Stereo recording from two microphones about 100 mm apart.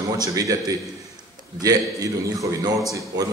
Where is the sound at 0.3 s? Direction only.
35° right (ahead or behind).